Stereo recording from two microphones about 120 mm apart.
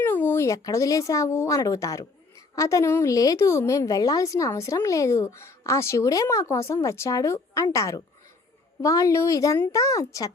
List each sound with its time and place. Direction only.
0.0 s a woman's voice: 20° left (ahead or behind)